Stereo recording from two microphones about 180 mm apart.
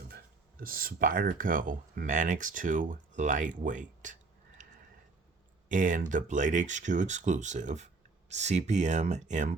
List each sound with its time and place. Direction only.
0.6 s speech: 50° right (ahead or behind)
5.6 s speech: 45° right (ahead or behind)